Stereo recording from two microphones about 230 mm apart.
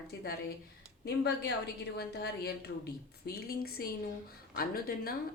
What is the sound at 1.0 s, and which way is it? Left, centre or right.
A woman's voice, left.